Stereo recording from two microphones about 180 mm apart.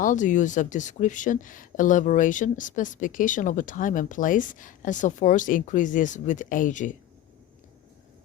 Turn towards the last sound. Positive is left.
turn(degrees=45)  # may be behind; listen again after turning